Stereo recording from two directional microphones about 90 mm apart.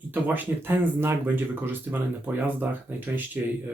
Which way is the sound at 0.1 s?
20° right (ahead or behind).